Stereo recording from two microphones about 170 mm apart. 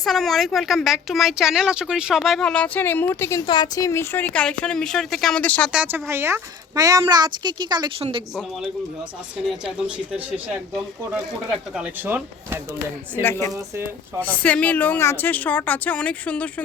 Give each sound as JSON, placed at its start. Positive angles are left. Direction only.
{"t": 0.0, "sound": "a woman's voice", "side_deg": 0}
{"t": 5.7, "sound": "a woman's voice", "side_deg": -10}
{"t": 9.5, "sound": "speech", "side_deg": -5}
{"t": 11.7, "sound": "speech", "side_deg": -10}
{"t": 14.2, "sound": "a woman's voice", "side_deg": 10}